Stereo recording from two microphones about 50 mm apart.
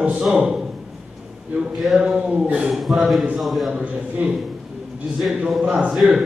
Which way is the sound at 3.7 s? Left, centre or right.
Centre.